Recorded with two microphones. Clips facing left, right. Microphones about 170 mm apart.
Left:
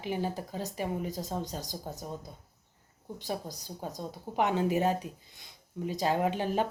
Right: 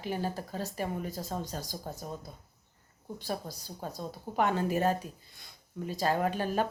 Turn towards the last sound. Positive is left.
turn(degrees=15)  # may be behind; listen again after turning